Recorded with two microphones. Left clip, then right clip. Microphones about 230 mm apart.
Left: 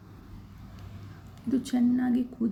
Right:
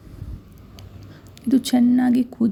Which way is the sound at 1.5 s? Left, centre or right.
Right.